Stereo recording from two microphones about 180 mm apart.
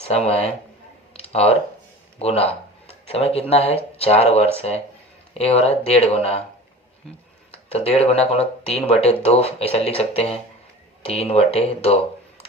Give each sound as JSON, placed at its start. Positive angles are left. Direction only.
{"t": 0.0, "sound": "speech", "side_deg": 35}
{"t": 1.2, "sound": "a sound", "side_deg": 35}
{"t": 3.5, "sound": "speech", "side_deg": 35}
{"t": 7.5, "sound": "speech", "side_deg": 35}